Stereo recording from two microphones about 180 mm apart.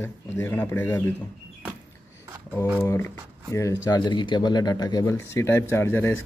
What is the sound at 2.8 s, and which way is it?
Speech, 15° left (ahead or behind).